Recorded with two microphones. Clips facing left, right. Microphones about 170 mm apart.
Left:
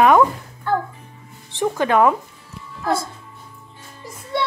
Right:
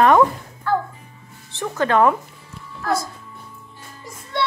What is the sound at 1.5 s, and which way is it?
Speech, 15° left (ahead or behind).